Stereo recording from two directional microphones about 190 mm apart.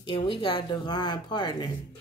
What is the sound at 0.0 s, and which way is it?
Speech, 25° left (ahead or behind).